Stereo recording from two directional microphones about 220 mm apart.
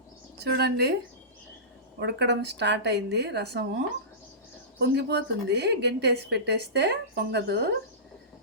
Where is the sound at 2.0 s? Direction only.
50° right (ahead or behind).